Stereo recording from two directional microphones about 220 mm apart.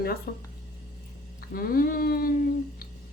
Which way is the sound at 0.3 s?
40° left (ahead or behind).